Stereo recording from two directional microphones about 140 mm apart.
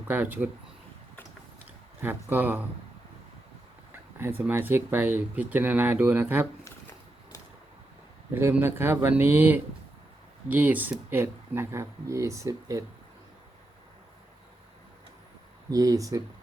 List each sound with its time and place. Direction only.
0.1 s speech: 10° right (ahead or behind)
2.0 s speech: 15° right (ahead or behind)
4.2 s speech: 15° right (ahead or behind)
8.4 s speech: 15° right (ahead or behind)
15.7 s speech: 25° right (ahead or behind)